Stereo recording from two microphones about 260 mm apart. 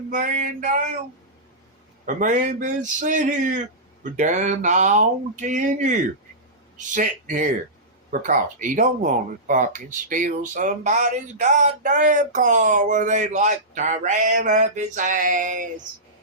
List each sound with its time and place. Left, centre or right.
0.1 s speech: right
2.0 s speech: right